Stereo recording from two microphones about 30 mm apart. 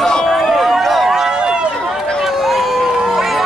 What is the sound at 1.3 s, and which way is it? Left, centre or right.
Run, right.